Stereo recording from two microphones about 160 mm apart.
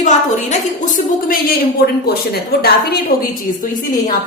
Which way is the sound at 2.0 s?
75° left (ahead or behind).